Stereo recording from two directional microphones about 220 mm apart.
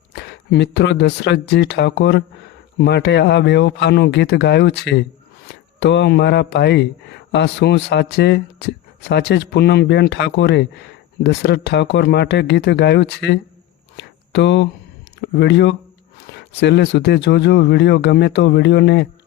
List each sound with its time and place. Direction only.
0.1 s speech: 50° left (ahead or behind)
13.9 s a sound: 55° left (ahead or behind)
15.2 s speech: 50° left (ahead or behind)